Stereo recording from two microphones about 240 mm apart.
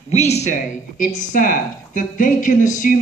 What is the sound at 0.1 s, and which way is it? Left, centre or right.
Speech, left.